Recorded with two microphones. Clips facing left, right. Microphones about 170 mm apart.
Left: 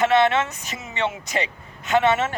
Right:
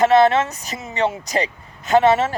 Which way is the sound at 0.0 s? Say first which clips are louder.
Right 4 dB; 35° right (ahead or behind).